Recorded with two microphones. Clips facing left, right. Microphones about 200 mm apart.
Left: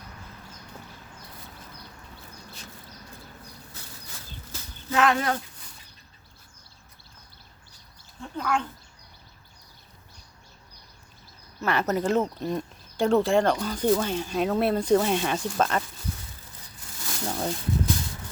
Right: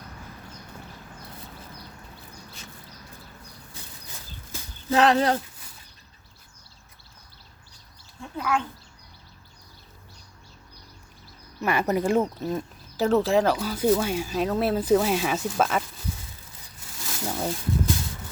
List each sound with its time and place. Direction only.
4.9 s speech: 30° right (ahead or behind)
8.2 s dog: 5° right (ahead or behind)
11.6 s speech: 10° right (ahead or behind)
17.2 s a sound: 5° right (ahead or behind)